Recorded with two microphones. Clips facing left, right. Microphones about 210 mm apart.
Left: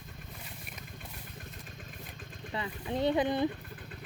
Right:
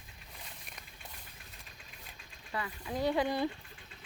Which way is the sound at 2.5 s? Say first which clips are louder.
Left 3 dB; 25° left (ahead or behind).